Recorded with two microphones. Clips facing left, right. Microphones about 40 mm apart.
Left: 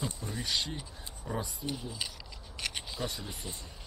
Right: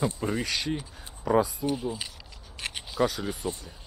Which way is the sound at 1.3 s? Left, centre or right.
Right.